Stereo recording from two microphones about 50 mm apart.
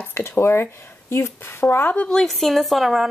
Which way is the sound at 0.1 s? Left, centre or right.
Left.